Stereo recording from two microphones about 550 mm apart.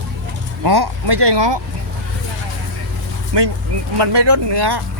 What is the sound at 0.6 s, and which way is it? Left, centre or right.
Speech, right.